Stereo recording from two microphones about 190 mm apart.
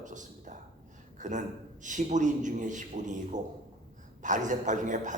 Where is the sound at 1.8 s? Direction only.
40° right (ahead or behind).